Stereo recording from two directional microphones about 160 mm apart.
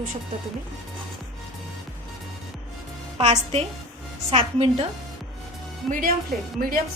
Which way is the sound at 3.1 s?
40° right (ahead or behind).